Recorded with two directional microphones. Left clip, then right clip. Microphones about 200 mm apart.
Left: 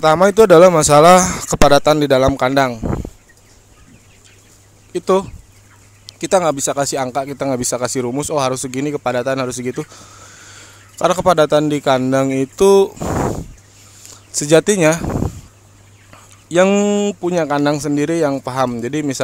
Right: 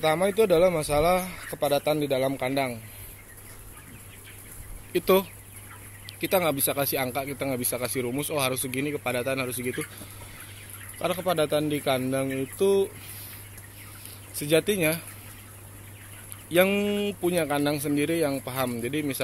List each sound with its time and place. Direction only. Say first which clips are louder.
0.0 s speech: left 12 dB; 40° left (ahead or behind)
4.9 s speech: left 6 dB; 25° left (ahead or behind)
11.0 s speech: left 13 dB; 40° left (ahead or behind)
14.3 s speech: left 11 dB; 40° left (ahead or behind)
16.4 s speech: left 9 dB; 35° left (ahead or behind)